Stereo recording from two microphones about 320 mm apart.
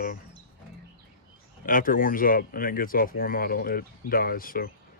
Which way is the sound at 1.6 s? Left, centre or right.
Left.